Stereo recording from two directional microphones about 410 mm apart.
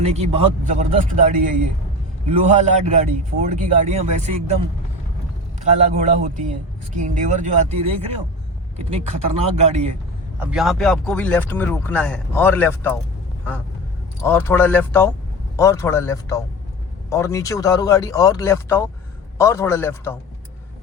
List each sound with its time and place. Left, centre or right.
0.0 s speech: centre
5.5 s speech: centre
10.4 s speech: centre
14.2 s speech: centre